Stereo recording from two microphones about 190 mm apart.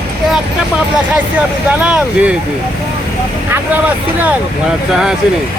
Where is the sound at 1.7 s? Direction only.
5° right (ahead or behind).